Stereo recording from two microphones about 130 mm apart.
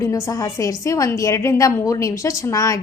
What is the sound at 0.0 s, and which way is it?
A woman's voice, 25° left (ahead or behind).